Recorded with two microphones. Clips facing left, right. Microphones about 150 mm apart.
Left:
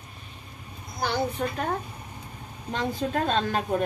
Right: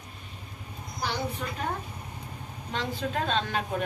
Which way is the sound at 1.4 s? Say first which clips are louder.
Left 6 dB; 45° left (ahead or behind).